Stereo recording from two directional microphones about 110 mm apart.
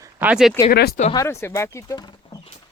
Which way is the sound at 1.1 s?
25° left (ahead or behind).